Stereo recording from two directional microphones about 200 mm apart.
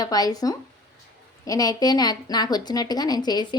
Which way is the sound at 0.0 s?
20° left (ahead or behind).